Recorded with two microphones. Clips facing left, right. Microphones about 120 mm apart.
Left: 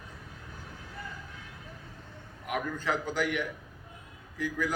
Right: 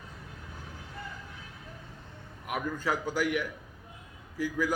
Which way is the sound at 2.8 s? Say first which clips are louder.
Right 2 dB; 10° right (ahead or behind).